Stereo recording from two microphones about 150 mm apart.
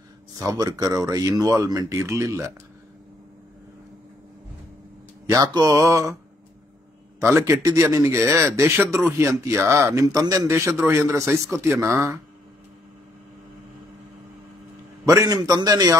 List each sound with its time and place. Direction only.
0.4 s speech: 25° right (ahead or behind)
5.2 s speech: 25° right (ahead or behind)
7.2 s a man's voice: 20° right (ahead or behind)
15.0 s speech: 25° right (ahead or behind)